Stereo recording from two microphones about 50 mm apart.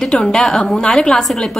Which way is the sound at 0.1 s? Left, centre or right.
Centre.